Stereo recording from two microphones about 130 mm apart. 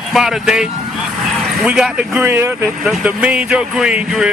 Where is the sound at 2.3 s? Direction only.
20° right (ahead or behind).